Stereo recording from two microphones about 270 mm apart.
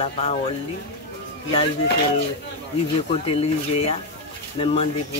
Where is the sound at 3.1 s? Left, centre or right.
Left.